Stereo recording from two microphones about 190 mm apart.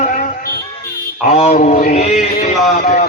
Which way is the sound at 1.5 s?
40° left (ahead or behind).